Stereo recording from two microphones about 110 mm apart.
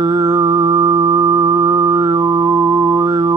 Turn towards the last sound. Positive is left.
turn(degrees=-30)  # may be behind; listen again after turning